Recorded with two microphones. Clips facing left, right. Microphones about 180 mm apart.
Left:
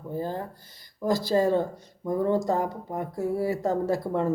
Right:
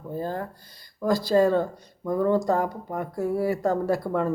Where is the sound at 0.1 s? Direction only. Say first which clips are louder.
Right 1 dB; 15° left (ahead or behind).